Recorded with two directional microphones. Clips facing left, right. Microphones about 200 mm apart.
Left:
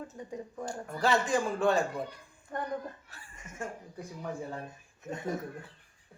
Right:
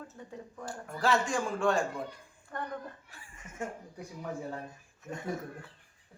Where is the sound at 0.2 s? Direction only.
15° left (ahead or behind).